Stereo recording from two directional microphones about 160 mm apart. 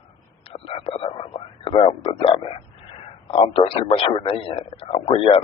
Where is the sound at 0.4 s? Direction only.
35° left (ahead or behind).